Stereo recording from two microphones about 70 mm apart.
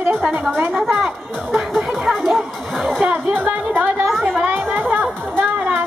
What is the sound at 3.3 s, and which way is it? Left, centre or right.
Music, right.